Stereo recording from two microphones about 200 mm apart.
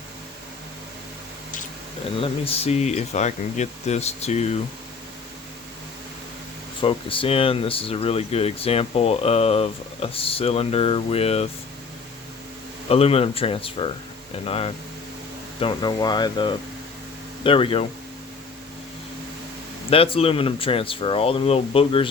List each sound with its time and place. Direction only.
2.1 s speech: 30° left (ahead or behind)
6.8 s speech: 25° left (ahead or behind)
12.9 s speech: 30° left (ahead or behind)
19.9 s speech: 30° left (ahead or behind)